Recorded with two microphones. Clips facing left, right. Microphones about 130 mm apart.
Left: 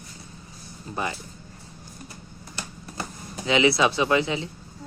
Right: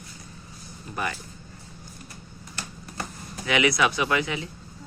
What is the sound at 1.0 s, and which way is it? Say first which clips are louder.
Speech: left 1 dB; 25° left (ahead or behind).